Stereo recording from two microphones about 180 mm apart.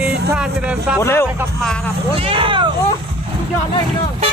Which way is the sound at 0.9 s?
15° left (ahead or behind).